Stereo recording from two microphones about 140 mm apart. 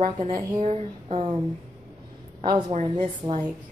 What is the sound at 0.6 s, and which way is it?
Speech, 45° right (ahead or behind).